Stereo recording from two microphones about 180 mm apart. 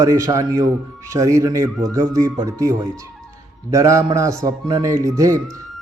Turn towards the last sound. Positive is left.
turn(degrees=-15)  # may be behind; listen again after turning